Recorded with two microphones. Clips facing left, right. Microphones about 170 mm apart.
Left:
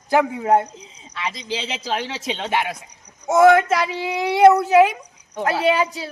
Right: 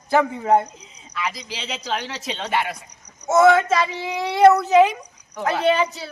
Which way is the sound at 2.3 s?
15° left (ahead or behind).